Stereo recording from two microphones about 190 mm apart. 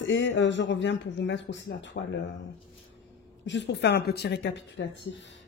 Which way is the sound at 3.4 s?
70° left (ahead or behind).